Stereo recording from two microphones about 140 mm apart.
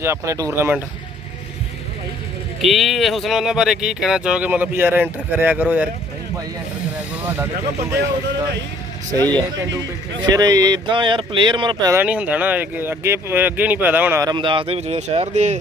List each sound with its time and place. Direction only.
0.0 s speech: 20° right (ahead or behind)
2.6 s speech: centre (ahead or behind)
9.1 s speech: 30° right (ahead or behind)
11.9 s speech: 10° right (ahead or behind)
14.3 s speech: 35° right (ahead or behind)
14.8 s speech: 55° right (ahead or behind)